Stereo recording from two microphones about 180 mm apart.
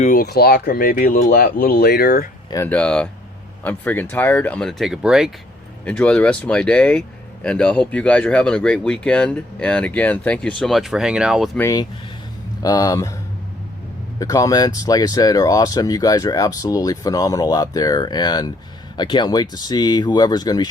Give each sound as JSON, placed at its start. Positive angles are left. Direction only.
{"t": 0.0, "sound": "speech", "side_deg": 50}
{"t": 2.5, "sound": "speech", "side_deg": 10}
{"t": 11.6, "sound": "speech", "side_deg": 20}
{"t": 14.2, "sound": "speech", "side_deg": 20}